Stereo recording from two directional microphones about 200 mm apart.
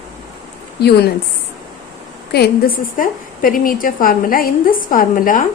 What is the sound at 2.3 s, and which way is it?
A woman's voice, 50° left (ahead or behind).